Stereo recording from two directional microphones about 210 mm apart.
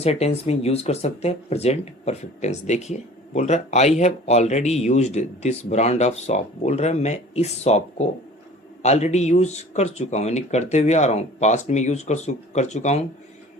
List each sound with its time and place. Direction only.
0.0 s speech: 30° left (ahead or behind)